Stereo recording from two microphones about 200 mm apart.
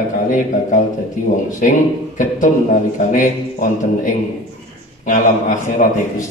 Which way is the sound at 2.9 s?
40° left (ahead or behind).